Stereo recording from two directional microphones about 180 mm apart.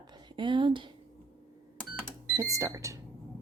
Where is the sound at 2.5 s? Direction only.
15° right (ahead or behind).